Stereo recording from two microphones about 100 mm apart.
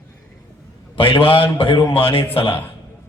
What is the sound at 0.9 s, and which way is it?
A man's voice, 65° left (ahead or behind).